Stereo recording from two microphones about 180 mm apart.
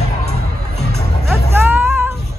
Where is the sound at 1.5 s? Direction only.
10° right (ahead or behind).